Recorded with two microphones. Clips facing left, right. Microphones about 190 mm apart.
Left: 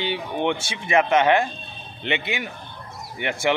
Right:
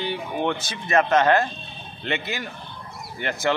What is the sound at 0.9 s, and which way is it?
Speech, 10° left (ahead or behind).